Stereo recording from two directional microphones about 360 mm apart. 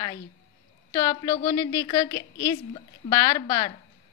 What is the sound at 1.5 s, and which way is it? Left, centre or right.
A woman's voice, centre.